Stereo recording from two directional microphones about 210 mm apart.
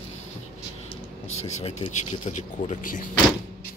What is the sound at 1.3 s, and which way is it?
Speech, 30° left (ahead or behind).